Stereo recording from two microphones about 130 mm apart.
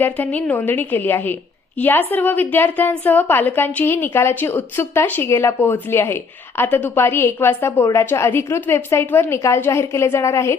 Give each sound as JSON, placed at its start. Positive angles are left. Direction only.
{"t": 0.0, "sound": "a woman's voice", "side_deg": 10}